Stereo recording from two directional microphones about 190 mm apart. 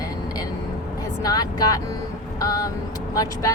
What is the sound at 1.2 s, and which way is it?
Speech, 20° left (ahead or behind).